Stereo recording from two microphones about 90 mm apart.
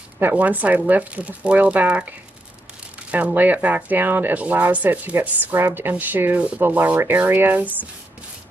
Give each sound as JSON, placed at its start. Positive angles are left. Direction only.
{"t": 0.2, "sound": "speech", "side_deg": -20}